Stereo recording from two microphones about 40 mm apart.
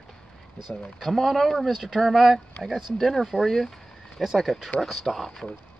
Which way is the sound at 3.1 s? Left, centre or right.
Centre.